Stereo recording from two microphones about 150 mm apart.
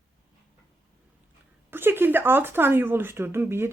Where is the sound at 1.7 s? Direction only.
15° right (ahead or behind).